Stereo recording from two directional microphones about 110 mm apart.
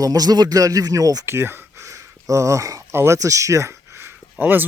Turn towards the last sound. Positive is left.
turn(degrees=-15)  # may be behind; listen again after turning